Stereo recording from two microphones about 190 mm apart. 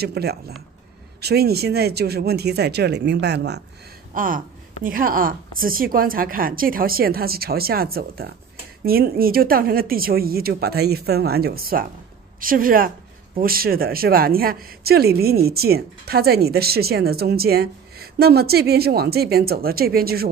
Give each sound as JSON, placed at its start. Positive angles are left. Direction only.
{"t": 0.0, "sound": "speech", "side_deg": -55}
{"t": 4.1, "sound": "a woman's voice", "side_deg": -45}